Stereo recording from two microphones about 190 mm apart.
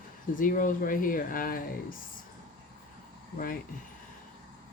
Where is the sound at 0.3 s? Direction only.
45° left (ahead or behind).